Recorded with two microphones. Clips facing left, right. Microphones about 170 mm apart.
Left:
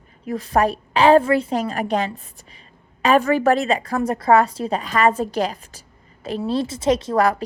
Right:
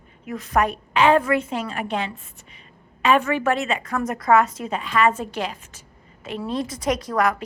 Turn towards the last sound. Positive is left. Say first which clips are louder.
# left 4 dB
turn(degrees=30)  # may be behind; listen again after turning